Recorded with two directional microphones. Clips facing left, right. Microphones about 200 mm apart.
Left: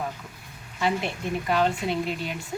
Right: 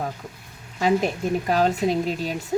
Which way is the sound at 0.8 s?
40° right (ahead or behind).